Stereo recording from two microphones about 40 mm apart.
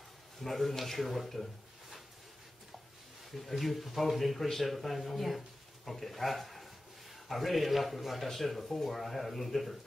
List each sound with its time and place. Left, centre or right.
0.4 s speech: centre
3.3 s a man's voice: centre